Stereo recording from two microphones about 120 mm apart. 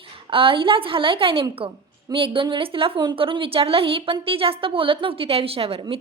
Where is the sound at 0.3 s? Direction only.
45° right (ahead or behind).